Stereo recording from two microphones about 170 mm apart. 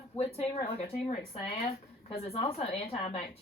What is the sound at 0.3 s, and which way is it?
A woman's voice, 35° left (ahead or behind).